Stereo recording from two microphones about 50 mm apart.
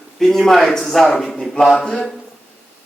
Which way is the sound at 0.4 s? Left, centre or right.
Centre.